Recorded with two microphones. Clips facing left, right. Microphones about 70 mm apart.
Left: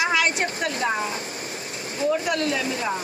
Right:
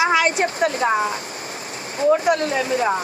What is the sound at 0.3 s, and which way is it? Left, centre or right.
Speech, right.